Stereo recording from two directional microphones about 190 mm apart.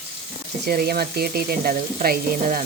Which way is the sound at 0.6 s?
55° right (ahead or behind).